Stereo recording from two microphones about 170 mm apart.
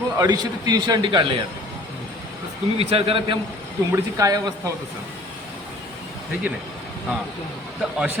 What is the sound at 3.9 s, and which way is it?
Speech, 20° right (ahead or behind).